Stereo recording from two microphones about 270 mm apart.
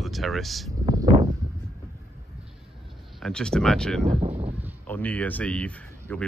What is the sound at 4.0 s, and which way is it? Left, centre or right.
Speech, right.